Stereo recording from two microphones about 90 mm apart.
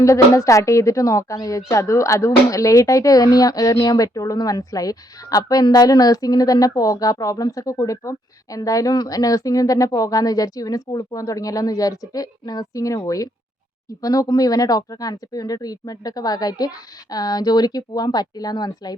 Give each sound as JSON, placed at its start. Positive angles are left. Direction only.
{"t": 0.0, "sound": "speech", "side_deg": 35}